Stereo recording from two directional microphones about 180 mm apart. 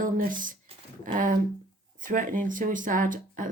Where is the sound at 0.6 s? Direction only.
45° right (ahead or behind).